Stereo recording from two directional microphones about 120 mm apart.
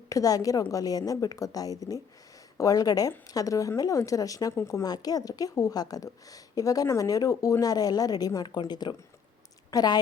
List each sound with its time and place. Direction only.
0.1 s a woman's voice: 30° left (ahead or behind)